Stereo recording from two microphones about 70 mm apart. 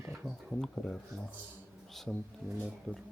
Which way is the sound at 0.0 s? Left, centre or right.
Right.